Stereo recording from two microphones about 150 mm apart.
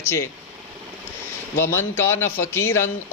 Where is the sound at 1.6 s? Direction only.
15° left (ahead or behind).